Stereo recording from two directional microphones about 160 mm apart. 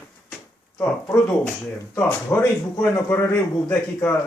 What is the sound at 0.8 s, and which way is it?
A man's voice, 15° left (ahead or behind).